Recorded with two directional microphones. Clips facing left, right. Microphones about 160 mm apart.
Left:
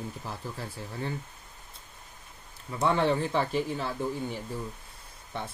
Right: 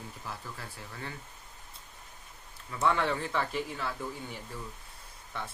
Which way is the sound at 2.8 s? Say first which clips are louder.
Left 3 dB; 25° left (ahead or behind).